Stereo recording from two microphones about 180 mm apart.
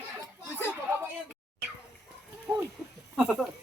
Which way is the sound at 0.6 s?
10° right (ahead or behind).